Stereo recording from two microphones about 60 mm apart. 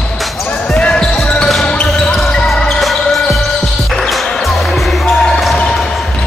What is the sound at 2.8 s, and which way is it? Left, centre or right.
Basketball bounce, centre.